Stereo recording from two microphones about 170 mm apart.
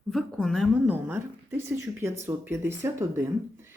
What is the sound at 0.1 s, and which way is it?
A woman's voice, centre (ahead or behind).